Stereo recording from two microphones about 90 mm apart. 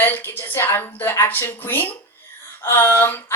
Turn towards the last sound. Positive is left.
turn(degrees=25)  # may be behind; listen again after turning